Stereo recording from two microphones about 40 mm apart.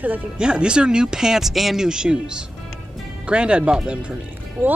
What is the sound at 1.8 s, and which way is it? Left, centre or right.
Speech, centre.